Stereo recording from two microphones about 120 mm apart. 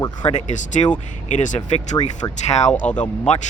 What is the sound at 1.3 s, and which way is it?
Speech, 90° left.